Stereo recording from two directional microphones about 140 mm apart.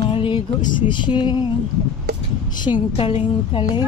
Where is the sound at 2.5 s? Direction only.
35° left (ahead or behind).